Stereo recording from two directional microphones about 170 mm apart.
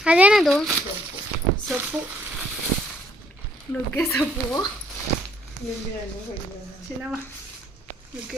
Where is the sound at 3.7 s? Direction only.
5° left (ahead or behind).